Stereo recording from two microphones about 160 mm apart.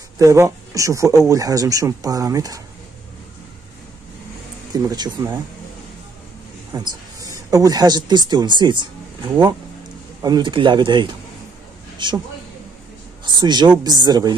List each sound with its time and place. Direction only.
0.2 s speech: 20° right (ahead or behind)
4.7 s speech: 25° right (ahead or behind)
6.7 s speech: 25° right (ahead or behind)
13.4 s speech: 25° right (ahead or behind)